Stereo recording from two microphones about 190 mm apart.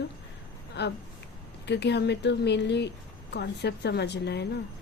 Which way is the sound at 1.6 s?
65° left (ahead or behind).